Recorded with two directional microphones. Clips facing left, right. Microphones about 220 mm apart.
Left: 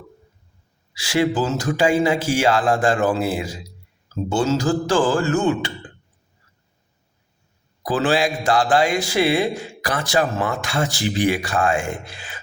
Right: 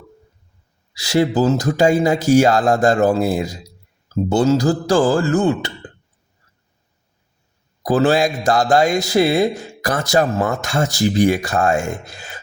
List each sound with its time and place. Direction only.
0.9 s speech: 40° right (ahead or behind)
7.9 s speech: 40° right (ahead or behind)